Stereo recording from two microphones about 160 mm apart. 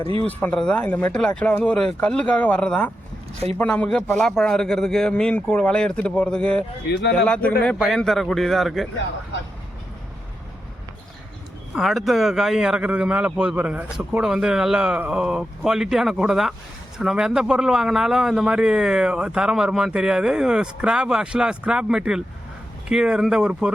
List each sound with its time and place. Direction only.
0.0 s speech: 35° right (ahead or behind)
0.3 s a man's voice: 10° left (ahead or behind)
6.9 s a man's voice: 90° left
7.3 s a man's voice: 5° left (ahead or behind)
11.7 s a man's voice: centre (ahead or behind)